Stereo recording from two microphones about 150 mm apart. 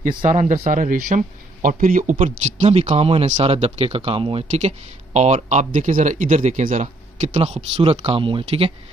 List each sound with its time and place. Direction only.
0.2 s speech: 55° right (ahead or behind)
2.2 s speech: 45° right (ahead or behind)
4.5 s speech: 50° right (ahead or behind)